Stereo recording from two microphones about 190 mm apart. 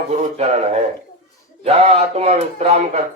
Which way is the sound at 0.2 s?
35° right (ahead or behind).